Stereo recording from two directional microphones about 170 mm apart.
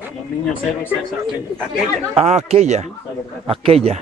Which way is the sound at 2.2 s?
40° right (ahead or behind).